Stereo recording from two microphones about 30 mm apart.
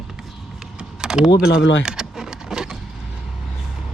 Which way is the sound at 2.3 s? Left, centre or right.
Right.